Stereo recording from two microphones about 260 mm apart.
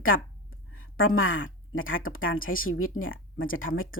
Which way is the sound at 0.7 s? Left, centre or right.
Left.